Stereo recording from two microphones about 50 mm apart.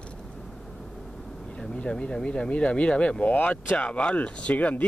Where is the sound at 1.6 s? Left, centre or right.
Centre.